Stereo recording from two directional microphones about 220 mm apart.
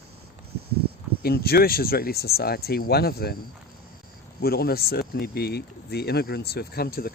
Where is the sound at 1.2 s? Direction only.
45° left (ahead or behind).